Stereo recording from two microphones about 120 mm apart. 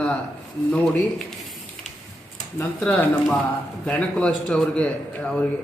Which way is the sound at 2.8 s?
15° left (ahead or behind).